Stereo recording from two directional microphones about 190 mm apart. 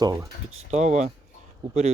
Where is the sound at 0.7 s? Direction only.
35° right (ahead or behind).